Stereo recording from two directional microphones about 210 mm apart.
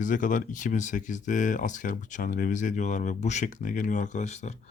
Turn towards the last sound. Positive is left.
turn(degrees=35)  # may be behind; listen again after turning